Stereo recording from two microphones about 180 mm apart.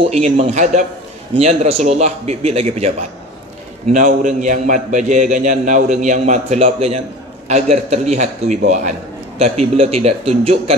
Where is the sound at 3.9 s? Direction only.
45° right (ahead or behind).